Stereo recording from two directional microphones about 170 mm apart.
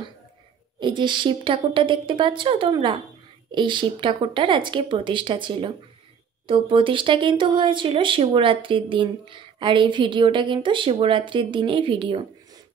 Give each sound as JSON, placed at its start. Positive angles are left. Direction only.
{"t": 0.7, "sound": "speech", "side_deg": -25}